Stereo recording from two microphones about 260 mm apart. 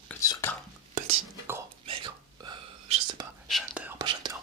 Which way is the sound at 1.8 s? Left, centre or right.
Centre.